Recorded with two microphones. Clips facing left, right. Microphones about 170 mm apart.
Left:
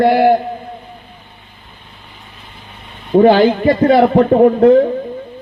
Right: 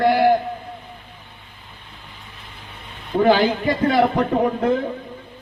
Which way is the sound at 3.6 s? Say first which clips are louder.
Left 7 dB; 45° left (ahead or behind).